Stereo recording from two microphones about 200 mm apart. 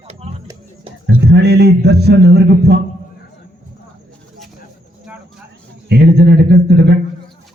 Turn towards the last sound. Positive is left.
turn(degrees=-55)  # may be behind; listen again after turning